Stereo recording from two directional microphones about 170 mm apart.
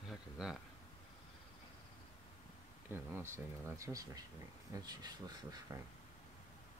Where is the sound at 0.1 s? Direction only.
5° right (ahead or behind).